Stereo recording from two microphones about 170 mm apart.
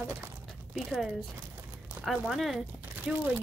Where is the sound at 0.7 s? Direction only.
Centre (ahead or behind).